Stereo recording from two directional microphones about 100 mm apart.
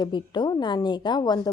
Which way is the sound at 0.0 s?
50° left (ahead or behind).